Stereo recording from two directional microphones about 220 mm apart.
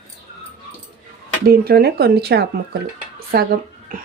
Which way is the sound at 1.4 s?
45° right (ahead or behind).